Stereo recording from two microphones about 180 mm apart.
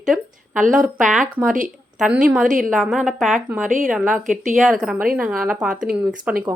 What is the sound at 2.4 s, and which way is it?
Speech, 45° right (ahead or behind).